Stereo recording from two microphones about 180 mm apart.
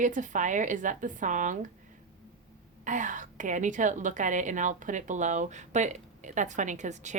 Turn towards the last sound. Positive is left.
turn(degrees=-40)  # may be behind; listen again after turning